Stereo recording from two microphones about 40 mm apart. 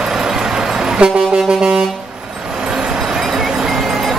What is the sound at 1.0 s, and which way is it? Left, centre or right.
Saxophone, centre.